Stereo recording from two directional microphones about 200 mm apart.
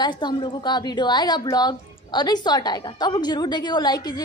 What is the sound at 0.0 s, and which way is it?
A woman's voice, 20° left (ahead or behind).